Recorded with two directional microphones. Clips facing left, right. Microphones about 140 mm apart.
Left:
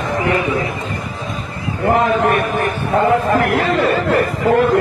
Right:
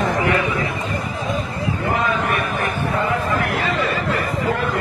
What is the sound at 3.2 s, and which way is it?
Chatter, 60° left (ahead or behind).